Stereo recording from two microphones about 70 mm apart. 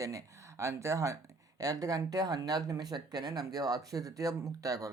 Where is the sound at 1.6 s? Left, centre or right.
Right.